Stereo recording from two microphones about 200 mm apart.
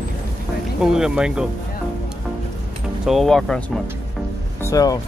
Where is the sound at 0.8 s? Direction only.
5° right (ahead or behind).